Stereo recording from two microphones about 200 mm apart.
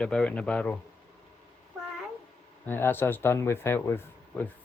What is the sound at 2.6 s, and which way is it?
A child's voice, 10° left (ahead or behind).